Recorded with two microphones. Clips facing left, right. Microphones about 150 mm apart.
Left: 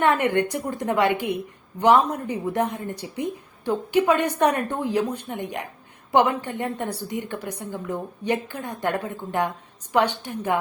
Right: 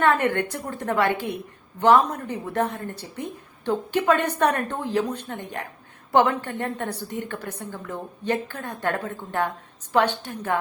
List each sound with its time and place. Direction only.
0.0 s a woman's voice: 15° left (ahead or behind)